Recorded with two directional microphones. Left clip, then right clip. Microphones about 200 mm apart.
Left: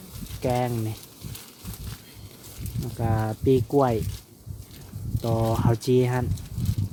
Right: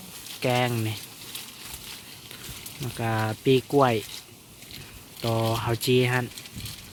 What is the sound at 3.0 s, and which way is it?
Speech, 5° left (ahead or behind).